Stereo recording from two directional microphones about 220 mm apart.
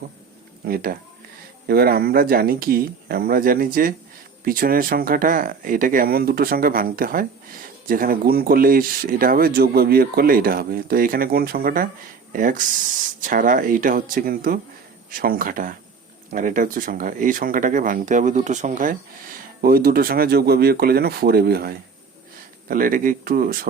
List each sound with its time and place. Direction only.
0.6 s speech: 40° right (ahead or behind)